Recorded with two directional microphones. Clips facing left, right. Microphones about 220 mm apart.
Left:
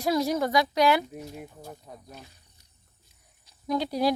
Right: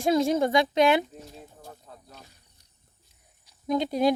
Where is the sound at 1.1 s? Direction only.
10° left (ahead or behind).